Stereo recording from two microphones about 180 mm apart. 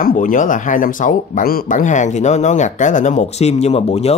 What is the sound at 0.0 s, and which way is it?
Speech, 50° left (ahead or behind).